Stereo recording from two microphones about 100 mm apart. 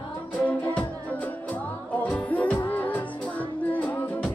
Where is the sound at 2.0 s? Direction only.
15° left (ahead or behind).